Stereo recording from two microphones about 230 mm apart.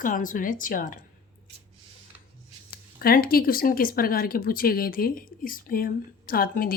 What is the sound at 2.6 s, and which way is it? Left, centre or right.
A woman's voice, left.